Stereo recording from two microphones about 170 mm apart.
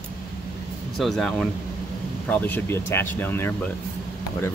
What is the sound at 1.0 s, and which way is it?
Speech, centre (ahead or behind).